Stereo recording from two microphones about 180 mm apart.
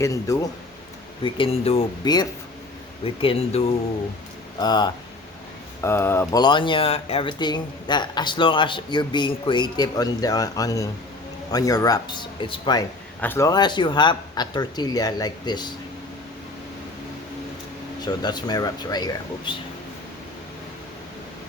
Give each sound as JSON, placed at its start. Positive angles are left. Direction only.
{"t": 0.0, "sound": "speech", "side_deg": 20}
{"t": 1.2, "sound": "speech", "side_deg": 30}
{"t": 2.0, "sound": "speech", "side_deg": 25}
{"t": 13.2, "sound": "speech", "side_deg": 15}
{"t": 18.0, "sound": "speech", "side_deg": 25}